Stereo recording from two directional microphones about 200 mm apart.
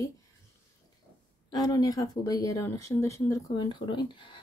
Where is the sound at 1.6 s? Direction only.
20° left (ahead or behind).